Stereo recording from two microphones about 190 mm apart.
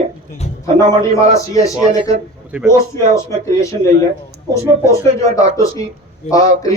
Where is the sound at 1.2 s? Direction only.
15° left (ahead or behind).